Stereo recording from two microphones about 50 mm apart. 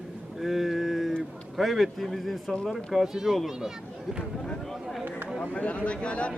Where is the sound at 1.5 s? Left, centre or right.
Centre.